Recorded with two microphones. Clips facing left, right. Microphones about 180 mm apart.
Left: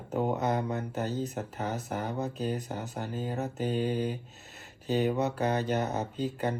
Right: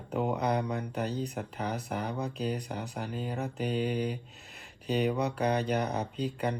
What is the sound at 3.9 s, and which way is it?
Mantra, 15° right (ahead or behind).